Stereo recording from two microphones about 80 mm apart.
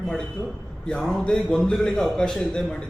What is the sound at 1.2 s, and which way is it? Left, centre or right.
Speech, centre.